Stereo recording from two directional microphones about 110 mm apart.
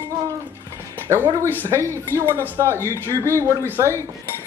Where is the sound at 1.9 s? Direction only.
25° right (ahead or behind).